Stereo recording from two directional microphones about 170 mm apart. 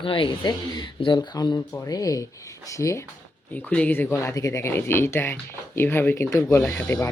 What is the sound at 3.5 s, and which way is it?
Speech, 10° left (ahead or behind).